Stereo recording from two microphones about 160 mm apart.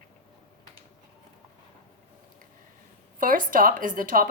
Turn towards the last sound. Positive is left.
turn(degrees=-60)  # may be behind; listen again after turning